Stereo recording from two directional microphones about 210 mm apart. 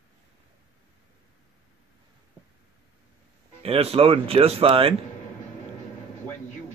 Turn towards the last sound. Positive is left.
turn(degrees=-25)  # may be behind; listen again after turning